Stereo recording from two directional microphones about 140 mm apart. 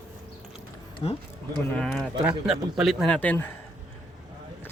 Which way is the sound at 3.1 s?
15° left (ahead or behind).